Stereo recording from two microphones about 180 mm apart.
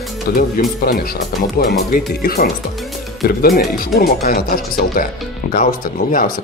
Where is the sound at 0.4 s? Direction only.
55° left (ahead or behind).